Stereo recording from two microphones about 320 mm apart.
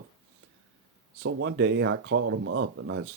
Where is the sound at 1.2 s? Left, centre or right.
Right.